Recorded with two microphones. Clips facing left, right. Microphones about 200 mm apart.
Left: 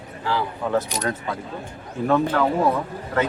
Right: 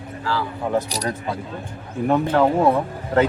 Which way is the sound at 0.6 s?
15° right (ahead or behind).